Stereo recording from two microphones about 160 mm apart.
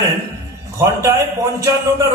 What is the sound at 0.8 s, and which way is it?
A man's voice, 20° right (ahead or behind).